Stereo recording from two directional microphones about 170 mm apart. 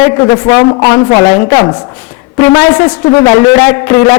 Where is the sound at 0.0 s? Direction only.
20° left (ahead or behind).